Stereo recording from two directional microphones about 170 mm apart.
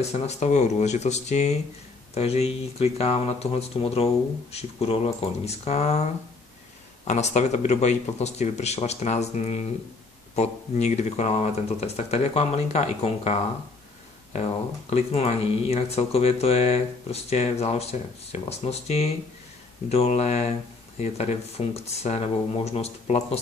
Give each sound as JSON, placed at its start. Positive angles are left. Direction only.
{"t": 0.0, "sound": "speech", "side_deg": 40}
{"t": 7.1, "sound": "speech", "side_deg": 45}
{"t": 14.9, "sound": "speech", "side_deg": 40}